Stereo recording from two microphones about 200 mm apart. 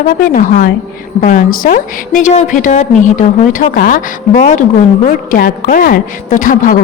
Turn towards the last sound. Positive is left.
turn(degrees=45)  # may be behind; listen again after turning